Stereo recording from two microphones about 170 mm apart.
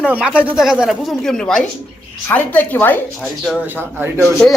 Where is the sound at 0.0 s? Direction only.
5° right (ahead or behind); by 3.0 s 10° left (ahead or behind).